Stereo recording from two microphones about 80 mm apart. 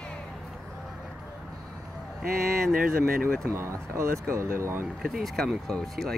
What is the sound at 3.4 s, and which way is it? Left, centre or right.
Speech, right.